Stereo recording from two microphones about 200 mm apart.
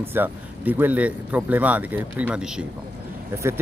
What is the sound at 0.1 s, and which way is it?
Speech, 10° right (ahead or behind).